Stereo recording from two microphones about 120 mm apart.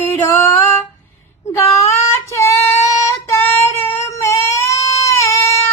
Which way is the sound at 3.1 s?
25° left (ahead or behind).